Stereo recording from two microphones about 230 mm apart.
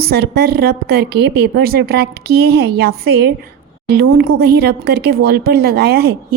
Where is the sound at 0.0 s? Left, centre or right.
Right.